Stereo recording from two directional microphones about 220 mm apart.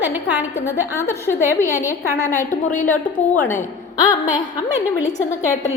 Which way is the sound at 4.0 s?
20° left (ahead or behind).